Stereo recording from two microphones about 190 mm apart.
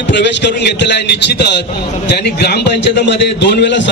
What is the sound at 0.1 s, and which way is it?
A man's voice, 65° left (ahead or behind).